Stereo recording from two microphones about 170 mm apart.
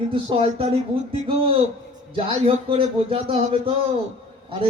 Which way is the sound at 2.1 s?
30° right (ahead or behind).